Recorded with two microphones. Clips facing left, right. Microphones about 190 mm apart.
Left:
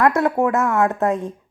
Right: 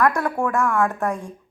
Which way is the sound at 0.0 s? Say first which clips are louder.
Left 4 dB; 20° left (ahead or behind).